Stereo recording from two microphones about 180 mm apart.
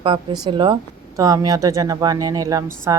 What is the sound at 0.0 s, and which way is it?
Speech, 30° right (ahead or behind).